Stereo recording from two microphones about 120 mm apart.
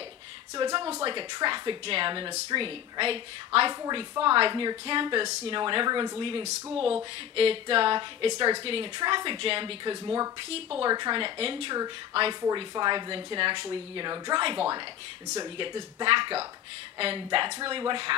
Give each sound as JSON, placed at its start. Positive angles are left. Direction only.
{"t": 0.6, "sound": "a woman's voice", "side_deg": -40}
{"t": 10.5, "sound": "a woman's voice", "side_deg": -50}
{"t": 10.9, "sound": "a woman's voice", "side_deg": -40}
{"t": 12.4, "sound": "a woman's voice", "side_deg": -35}